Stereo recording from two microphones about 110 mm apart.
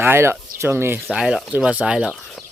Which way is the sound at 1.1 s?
5° right (ahead or behind).